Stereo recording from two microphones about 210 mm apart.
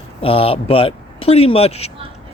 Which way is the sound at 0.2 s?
25° left (ahead or behind).